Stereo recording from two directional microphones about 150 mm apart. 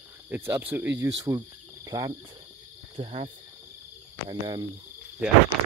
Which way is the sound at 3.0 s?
40° right (ahead or behind).